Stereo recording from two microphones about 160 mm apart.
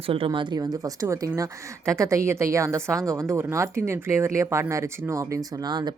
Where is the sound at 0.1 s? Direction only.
35° right (ahead or behind).